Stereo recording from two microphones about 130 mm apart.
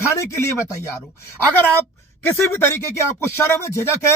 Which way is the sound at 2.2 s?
15° left (ahead or behind).